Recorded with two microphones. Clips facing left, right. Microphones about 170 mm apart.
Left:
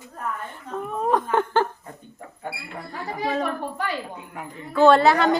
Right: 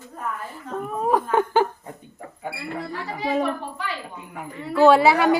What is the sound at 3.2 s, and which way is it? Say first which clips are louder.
Speech: right 2 dB; 10° right (ahead or behind).